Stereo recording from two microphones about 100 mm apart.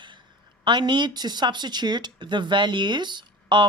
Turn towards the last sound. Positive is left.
turn(degrees=-50)  # may be behind; listen again after turning